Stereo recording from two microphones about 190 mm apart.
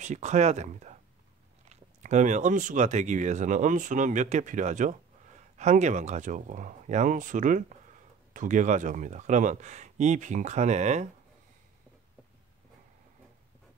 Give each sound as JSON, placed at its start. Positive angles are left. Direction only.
{"t": 0.0, "sound": "speech", "side_deg": -40}